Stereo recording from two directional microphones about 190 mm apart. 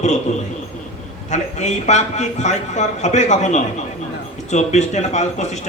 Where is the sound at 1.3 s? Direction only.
40° left (ahead or behind).